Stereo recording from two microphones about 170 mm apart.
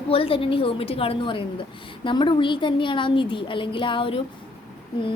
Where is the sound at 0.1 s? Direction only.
35° left (ahead or behind).